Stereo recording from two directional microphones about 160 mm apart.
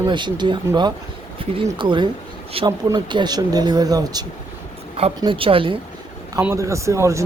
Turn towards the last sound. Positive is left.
turn(degrees=-20)  # may be behind; listen again after turning